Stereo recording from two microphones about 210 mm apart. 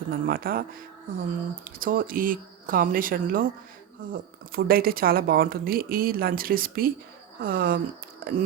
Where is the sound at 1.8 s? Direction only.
40° right (ahead or behind).